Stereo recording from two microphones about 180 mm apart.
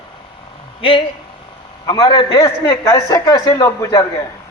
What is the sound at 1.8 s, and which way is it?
Speech, 25° left (ahead or behind).